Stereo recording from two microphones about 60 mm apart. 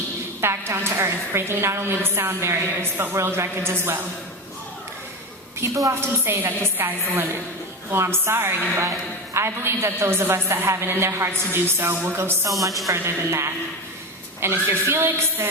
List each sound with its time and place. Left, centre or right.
0.4 s a woman's voice: right
5.5 s a woman's voice: right
5.9 s a woman's voice: right